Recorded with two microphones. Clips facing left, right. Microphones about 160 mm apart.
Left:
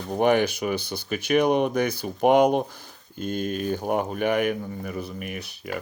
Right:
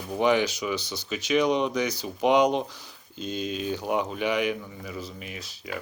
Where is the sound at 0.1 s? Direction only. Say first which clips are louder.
Left 2 dB; 55° left (ahead or behind).